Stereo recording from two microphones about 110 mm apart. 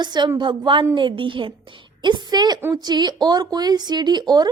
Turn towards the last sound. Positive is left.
turn(degrees=-40)  # may be behind; listen again after turning